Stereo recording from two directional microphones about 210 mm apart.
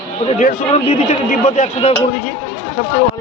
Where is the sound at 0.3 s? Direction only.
30° left (ahead or behind).